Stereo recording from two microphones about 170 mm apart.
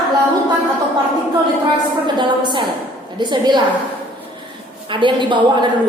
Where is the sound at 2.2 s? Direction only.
25° right (ahead or behind).